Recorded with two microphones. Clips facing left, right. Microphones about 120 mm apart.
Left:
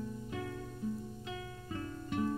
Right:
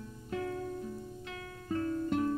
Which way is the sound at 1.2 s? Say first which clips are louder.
Left 1 dB; 20° left (ahead or behind).